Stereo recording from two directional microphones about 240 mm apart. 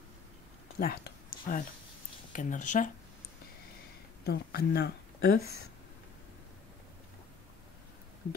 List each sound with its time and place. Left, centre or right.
0.7 s a sound: left
2.3 s speech: left
4.3 s a woman's voice: left
5.4 s speech: centre